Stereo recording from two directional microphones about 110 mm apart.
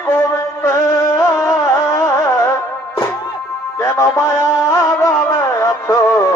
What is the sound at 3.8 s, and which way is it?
Music, 25° left (ahead or behind).